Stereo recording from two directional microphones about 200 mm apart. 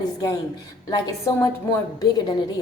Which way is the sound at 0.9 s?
15° left (ahead or behind).